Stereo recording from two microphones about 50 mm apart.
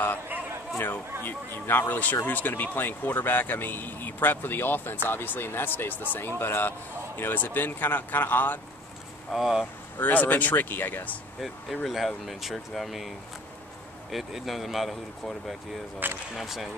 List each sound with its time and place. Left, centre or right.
1.2 s speech: left
9.3 s speech: centre
9.9 s speech: left
11.4 s speech: centre
14.1 s speech: centre
16.0 s speech: right
16.3 s speech: centre